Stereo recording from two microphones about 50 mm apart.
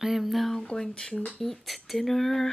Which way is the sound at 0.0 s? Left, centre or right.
Centre.